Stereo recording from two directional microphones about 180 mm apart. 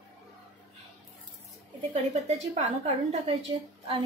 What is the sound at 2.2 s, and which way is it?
A woman's voice, 35° right (ahead or behind).